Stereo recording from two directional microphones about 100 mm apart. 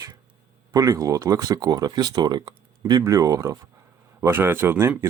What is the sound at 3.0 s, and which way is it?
Speech, 30° right (ahead or behind).